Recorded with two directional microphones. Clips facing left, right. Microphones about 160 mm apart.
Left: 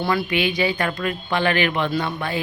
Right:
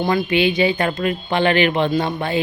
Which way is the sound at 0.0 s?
20° right (ahead or behind).